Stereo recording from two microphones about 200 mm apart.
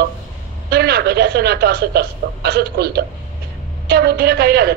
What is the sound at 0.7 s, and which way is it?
A woman's voice, 50° right (ahead or behind).